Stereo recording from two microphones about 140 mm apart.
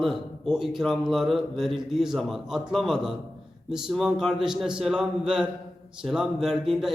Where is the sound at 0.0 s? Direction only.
Centre (ahead or behind).